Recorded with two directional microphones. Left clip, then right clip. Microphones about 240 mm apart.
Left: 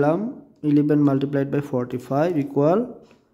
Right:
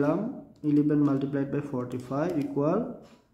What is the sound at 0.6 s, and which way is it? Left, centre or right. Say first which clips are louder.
A man's voice: left 6 dB; left.